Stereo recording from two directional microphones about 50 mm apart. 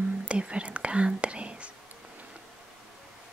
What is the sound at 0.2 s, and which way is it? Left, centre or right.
Whispering, right.